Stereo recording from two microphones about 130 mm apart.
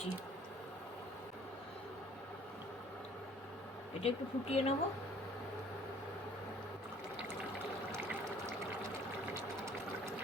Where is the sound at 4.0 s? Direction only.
50° left (ahead or behind).